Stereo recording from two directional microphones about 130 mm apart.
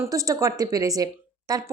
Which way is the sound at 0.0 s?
25° right (ahead or behind).